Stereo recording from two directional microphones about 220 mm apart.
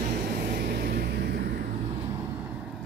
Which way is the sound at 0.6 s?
45° right (ahead or behind).